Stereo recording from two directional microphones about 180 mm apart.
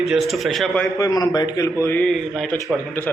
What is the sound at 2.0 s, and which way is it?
Speech, centre (ahead or behind).